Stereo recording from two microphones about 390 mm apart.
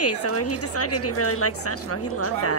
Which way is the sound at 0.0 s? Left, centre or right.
Left.